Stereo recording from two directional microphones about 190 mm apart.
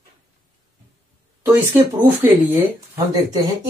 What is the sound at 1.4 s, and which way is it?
Speech, 10° right (ahead or behind).